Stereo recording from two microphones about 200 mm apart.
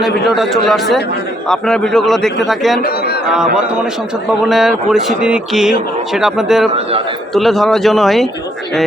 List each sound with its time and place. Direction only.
0.3 s speech: centre (ahead or behind)
2.8 s speech: 55° left (ahead or behind)
3.3 s speech: 5° right (ahead or behind)